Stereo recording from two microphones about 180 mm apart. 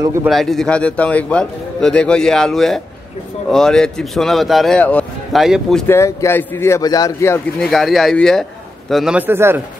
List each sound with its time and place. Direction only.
0.0 s a man's voice: 15° right (ahead or behind)
0.3 s a man's voice: centre (ahead or behind)
5.9 s speech: 15° left (ahead or behind)
7.7 s a man's voice: centre (ahead or behind)